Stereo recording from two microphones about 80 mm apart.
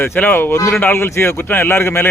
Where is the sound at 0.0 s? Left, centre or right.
Left.